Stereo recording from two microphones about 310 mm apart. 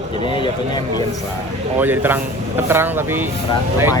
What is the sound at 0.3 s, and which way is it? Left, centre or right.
Speech, centre.